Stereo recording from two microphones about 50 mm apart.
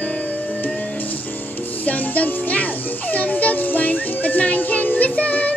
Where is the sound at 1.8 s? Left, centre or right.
Left.